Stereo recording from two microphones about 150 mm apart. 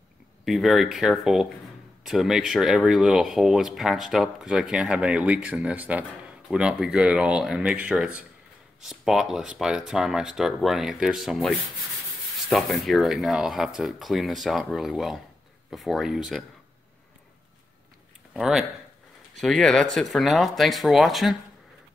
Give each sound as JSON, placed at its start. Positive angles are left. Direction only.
{"t": 0.5, "sound": "speech", "side_deg": 0}
{"t": 18.3, "sound": "speech", "side_deg": 0}